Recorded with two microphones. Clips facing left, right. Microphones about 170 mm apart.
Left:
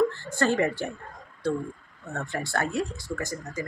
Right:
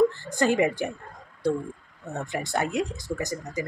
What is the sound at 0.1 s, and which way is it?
Speech, 15° right (ahead or behind).